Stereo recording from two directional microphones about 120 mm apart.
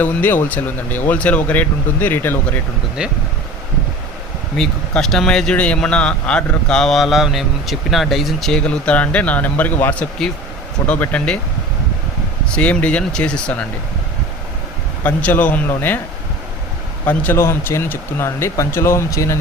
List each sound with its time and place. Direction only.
0.0 s speech: 15° left (ahead or behind)
3.0 s speech: 10° right (ahead or behind)
4.5 s a man's voice: 5° left (ahead or behind)
12.5 s speech: 10° left (ahead or behind)
15.0 s speech: 15° left (ahead or behind)
17.1 s speech: 15° left (ahead or behind)